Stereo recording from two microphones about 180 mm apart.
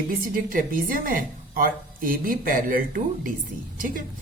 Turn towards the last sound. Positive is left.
turn(degrees=-50)  # may be behind; listen again after turning